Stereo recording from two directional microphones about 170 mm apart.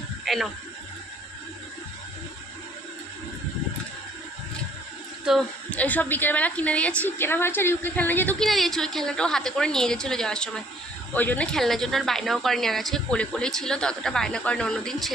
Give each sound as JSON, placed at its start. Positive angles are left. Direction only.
{"t": 0.3, "sound": "speech", "side_deg": 0}
{"t": 5.2, "sound": "a woman's voice", "side_deg": 0}